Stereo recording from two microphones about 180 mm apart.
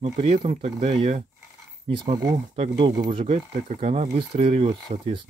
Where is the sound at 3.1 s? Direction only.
35° right (ahead or behind).